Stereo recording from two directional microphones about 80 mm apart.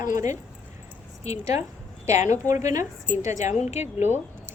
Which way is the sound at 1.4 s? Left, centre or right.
Right.